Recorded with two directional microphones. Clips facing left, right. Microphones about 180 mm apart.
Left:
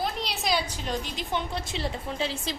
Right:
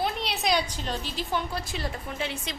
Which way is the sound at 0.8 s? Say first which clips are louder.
Even; 15° left (ahead or behind).